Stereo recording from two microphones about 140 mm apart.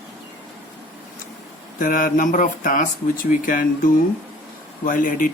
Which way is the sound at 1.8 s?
90° left.